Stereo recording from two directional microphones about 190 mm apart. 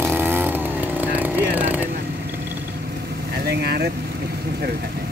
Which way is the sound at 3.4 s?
55° right (ahead or behind).